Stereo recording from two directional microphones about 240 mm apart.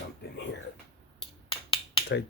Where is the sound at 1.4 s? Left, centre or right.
Left.